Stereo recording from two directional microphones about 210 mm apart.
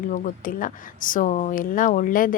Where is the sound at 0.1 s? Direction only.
40° left (ahead or behind).